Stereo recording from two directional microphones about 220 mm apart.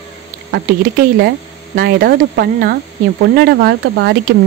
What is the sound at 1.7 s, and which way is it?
Speech, 45° right (ahead or behind).